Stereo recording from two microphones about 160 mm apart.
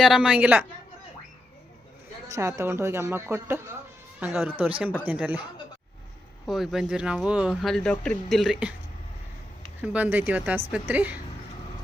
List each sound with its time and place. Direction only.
0.0 s a woman's voice: 5° right (ahead or behind)
2.2 s a woman's voice: 20° right (ahead or behind)
6.4 s speech: centre (ahead or behind)
9.8 s a woman's voice: 10° right (ahead or behind)